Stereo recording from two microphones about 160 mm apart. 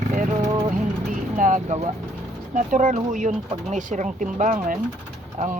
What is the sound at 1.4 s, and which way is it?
Speech, 55° right (ahead or behind).